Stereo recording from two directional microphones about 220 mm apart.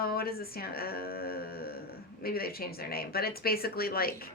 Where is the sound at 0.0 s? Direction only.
45° left (ahead or behind).